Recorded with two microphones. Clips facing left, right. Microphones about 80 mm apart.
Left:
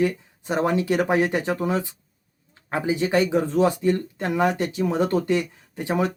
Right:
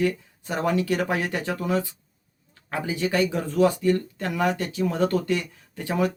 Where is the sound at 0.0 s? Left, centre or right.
Left.